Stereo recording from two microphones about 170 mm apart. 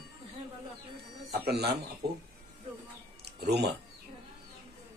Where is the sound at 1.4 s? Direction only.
75° right (ahead or behind).